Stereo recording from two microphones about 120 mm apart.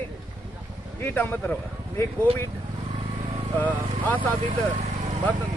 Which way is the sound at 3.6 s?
15° left (ahead or behind).